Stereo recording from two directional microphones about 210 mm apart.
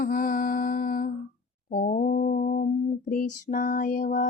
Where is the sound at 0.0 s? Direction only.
40° left (ahead or behind).